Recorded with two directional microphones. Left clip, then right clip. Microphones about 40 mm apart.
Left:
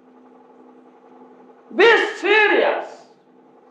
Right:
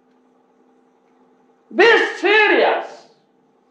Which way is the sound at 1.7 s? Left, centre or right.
Centre.